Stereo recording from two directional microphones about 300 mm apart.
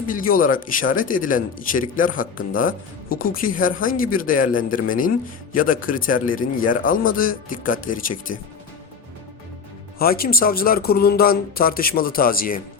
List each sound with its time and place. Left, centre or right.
0.1 s a man's voice: left
10.0 s a man's voice: left